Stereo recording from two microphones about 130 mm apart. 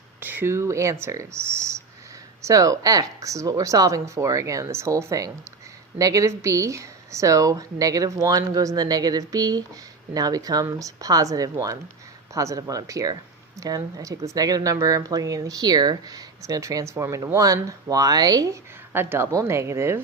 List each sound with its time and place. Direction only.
0.2 s a woman's voice: 15° right (ahead or behind)